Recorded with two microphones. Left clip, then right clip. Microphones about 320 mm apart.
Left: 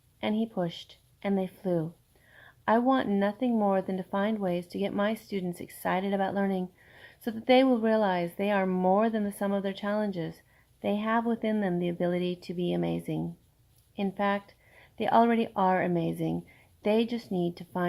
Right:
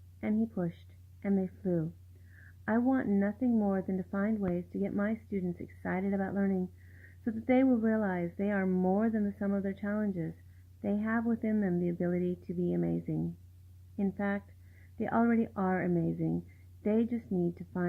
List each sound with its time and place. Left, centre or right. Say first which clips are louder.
0.2 s speech: left 4 dB; left